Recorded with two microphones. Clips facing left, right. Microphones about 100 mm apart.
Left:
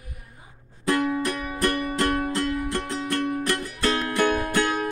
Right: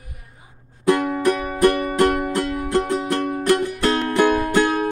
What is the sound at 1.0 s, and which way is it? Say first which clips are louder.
Music: right 6 dB; 50° right (ahead or behind).